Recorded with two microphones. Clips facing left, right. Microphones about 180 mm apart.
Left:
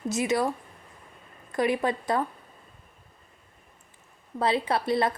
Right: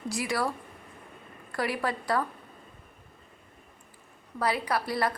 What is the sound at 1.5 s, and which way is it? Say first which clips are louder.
Speech: left 5 dB; 20° left (ahead or behind).